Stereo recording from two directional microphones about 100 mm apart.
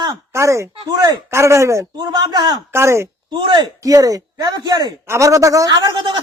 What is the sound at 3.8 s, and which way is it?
Speech, 35° right (ahead or behind).